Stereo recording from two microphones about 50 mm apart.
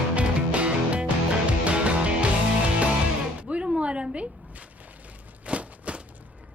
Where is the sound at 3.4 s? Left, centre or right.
Right.